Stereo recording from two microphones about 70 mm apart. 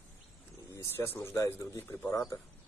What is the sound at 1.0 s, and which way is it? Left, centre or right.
Speech, left.